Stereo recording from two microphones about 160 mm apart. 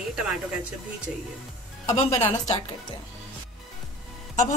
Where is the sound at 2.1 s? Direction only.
15° left (ahead or behind).